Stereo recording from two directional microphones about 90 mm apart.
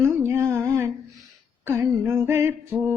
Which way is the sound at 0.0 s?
25° right (ahead or behind).